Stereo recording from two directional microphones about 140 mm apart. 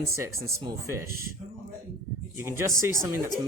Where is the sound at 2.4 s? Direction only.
20° right (ahead or behind).